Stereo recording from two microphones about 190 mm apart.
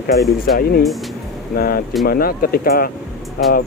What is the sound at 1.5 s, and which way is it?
Speech, 50° left (ahead or behind).